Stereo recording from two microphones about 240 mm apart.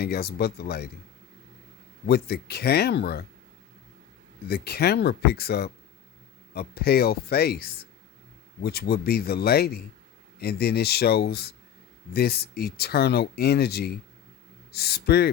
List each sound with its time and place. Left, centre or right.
0.0 s speech: left
2.0 s speech: left
4.4 s speech: left